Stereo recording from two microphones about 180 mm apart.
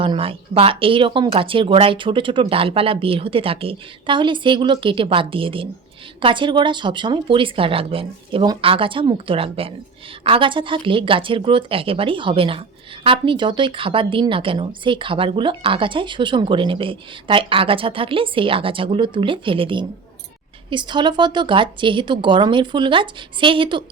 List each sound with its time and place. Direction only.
0.0 s a woman's voice: 30° right (ahead or behind)